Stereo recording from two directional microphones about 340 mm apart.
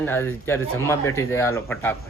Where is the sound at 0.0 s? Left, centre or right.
Centre.